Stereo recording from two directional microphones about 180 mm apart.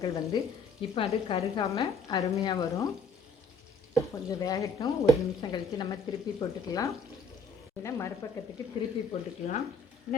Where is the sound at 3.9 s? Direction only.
20° left (ahead or behind).